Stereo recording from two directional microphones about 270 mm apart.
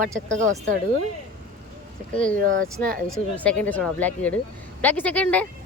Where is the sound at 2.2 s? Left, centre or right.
Right.